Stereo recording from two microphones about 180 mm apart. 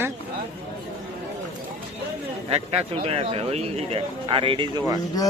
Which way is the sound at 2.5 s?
35° right (ahead or behind).